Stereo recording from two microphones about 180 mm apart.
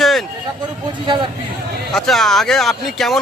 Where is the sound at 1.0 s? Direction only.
25° right (ahead or behind).